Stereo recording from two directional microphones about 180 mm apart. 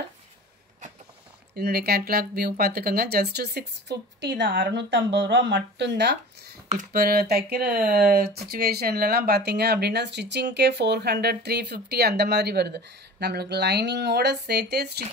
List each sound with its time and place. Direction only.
1.5 s speech: 60° right (ahead or behind); by 4.6 s 85° right
4.6 s speech: 70° right (ahead or behind)
6.7 s speech: 50° right (ahead or behind)